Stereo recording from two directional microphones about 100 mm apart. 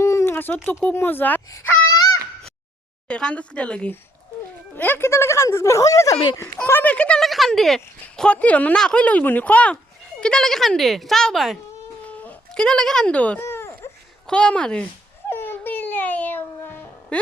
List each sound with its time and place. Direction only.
0.0 s a sound: 30° left (ahead or behind)
0.9 s speech: 20° left (ahead or behind)
3.1 s speech: 10° left (ahead or behind); by 6.4 s 30° left (ahead or behind)
6.4 s speech: 20° left (ahead or behind)
7.3 s speech: centre (ahead or behind)
12.0 s speech: 15° left (ahead or behind)
13.4 s a sound: 25° left (ahead or behind)
14.3 s speech: 10° left (ahead or behind)
15.3 s a sound: 20° left (ahead or behind)